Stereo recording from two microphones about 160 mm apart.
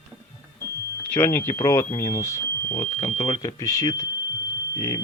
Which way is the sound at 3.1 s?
30° left (ahead or behind).